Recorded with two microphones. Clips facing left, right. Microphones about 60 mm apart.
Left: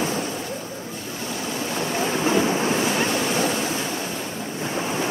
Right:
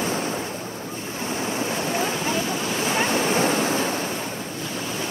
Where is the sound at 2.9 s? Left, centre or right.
Right.